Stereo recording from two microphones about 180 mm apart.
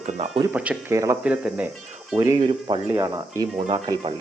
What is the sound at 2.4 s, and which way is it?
Speech, 25° right (ahead or behind).